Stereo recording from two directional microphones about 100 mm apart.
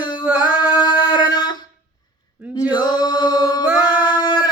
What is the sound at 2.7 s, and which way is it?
Mantra, 45° left (ahead or behind).